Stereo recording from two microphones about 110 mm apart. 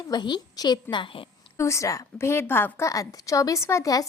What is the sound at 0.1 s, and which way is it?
Speech, 40° left (ahead or behind).